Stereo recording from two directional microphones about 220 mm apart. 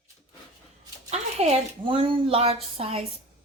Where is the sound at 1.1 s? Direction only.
30° right (ahead or behind).